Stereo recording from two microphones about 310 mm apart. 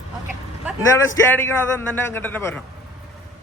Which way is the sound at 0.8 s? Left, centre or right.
Centre.